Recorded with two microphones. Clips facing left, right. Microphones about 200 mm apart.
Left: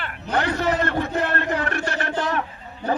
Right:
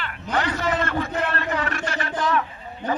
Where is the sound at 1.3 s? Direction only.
60° left (ahead or behind).